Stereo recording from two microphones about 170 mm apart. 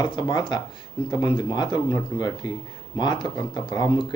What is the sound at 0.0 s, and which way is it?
Speech, 25° left (ahead or behind).